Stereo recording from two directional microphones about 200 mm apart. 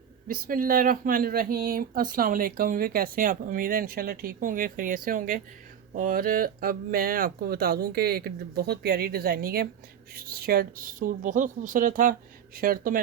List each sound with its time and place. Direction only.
0.3 s speech: 45° right (ahead or behind)